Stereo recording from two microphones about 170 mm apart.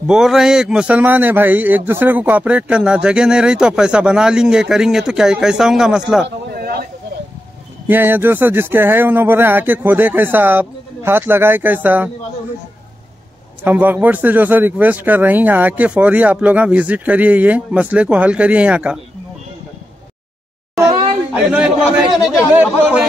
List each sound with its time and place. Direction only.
0.0 s a man's voice: centre (ahead or behind)
6.2 s a sound: 65° right (ahead or behind)
7.8 s a man's voice: 10° right (ahead or behind)
13.7 s a man's voice: 10° right (ahead or behind)
21.5 s a man's voice: 5° right (ahead or behind)